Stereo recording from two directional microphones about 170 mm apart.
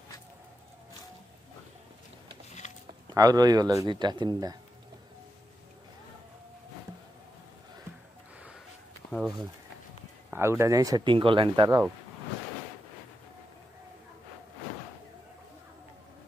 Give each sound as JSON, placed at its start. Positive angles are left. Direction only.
{"t": 3.1, "sound": "speech", "side_deg": -20}
{"t": 10.3, "sound": "speech", "side_deg": -15}